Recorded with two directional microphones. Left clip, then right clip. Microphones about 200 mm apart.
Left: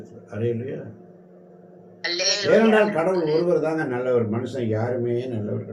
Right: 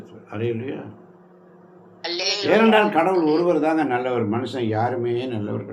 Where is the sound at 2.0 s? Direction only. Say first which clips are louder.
Left 1 dB; 5° left (ahead or behind).